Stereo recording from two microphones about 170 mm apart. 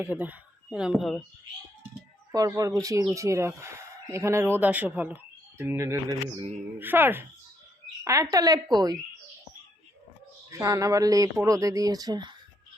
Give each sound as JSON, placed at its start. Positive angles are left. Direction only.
{"t": 0.0, "sound": "speech", "side_deg": -10}
{"t": 2.3, "sound": "speech", "side_deg": -20}
{"t": 10.5, "sound": "speech", "side_deg": -20}